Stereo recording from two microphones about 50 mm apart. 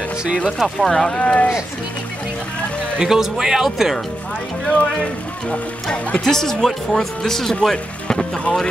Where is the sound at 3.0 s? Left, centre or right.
Centre.